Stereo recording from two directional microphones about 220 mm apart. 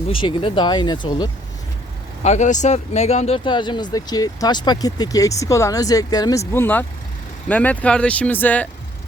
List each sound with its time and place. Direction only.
0.1 s speech: 25° left (ahead or behind)
2.2 s speech: 30° left (ahead or behind); by 8.6 s 10° left (ahead or behind)